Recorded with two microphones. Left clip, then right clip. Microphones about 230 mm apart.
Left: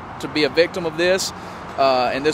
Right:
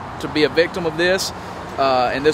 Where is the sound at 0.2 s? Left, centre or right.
Left.